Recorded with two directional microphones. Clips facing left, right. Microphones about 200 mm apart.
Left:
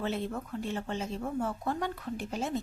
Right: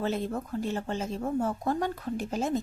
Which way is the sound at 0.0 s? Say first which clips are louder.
Right 3 dB; 40° right (ahead or behind).